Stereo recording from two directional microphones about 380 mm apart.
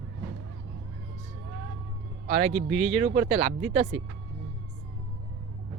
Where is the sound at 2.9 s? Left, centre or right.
Centre.